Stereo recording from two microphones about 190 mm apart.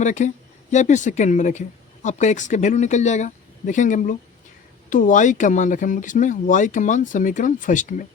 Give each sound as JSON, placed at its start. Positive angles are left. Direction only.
{"t": 0.0, "sound": "speech", "side_deg": 40}